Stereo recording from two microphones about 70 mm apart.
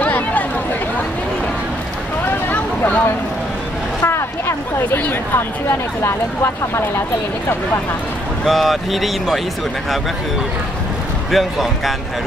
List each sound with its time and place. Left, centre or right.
0.0 s a sound: left
2.5 s vehicle: left
4.0 s a sound: left
5.3 s speech: left
8.5 s speech: centre
11.3 s speech: centre